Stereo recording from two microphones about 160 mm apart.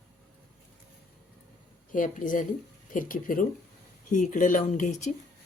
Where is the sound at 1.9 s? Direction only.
55° left (ahead or behind).